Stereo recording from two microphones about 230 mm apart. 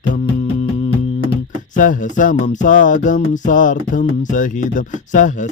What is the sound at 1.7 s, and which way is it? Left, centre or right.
Music, left.